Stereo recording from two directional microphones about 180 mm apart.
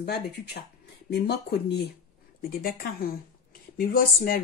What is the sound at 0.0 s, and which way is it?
Speech, 65° left (ahead or behind).